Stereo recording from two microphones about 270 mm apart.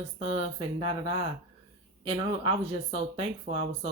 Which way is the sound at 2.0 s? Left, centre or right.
Centre.